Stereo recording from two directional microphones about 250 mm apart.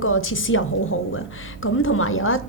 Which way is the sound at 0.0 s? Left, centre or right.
Left.